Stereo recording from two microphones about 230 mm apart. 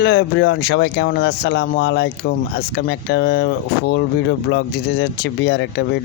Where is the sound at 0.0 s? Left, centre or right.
Left.